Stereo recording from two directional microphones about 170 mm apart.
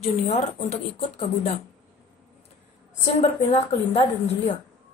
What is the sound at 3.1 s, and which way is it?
Speech, 35° left (ahead or behind).